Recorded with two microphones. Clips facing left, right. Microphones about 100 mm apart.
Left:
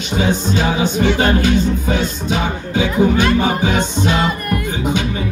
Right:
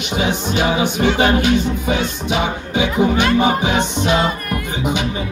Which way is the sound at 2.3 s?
15° right (ahead or behind).